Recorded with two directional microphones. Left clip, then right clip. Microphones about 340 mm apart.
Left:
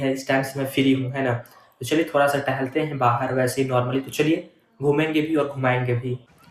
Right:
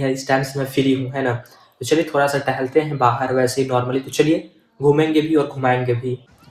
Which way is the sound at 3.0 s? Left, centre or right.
Centre.